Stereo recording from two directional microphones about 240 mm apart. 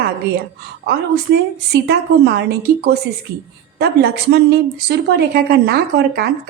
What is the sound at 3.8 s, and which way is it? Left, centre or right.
A woman's voice, right.